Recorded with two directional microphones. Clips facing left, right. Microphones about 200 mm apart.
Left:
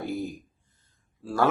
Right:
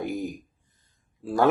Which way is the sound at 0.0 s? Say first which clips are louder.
Right 1 dB; 15° right (ahead or behind).